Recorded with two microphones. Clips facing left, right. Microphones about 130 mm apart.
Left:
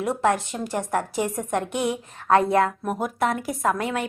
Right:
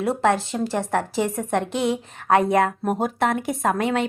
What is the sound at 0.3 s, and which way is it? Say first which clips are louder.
A woman's voice: right 2 dB; 30° right (ahead or behind).